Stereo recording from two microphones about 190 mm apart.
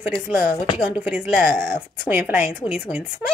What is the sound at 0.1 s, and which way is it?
A woman's voice, 10° right (ahead or behind).